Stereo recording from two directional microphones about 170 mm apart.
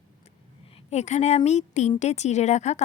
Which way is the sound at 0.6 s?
35° left (ahead or behind).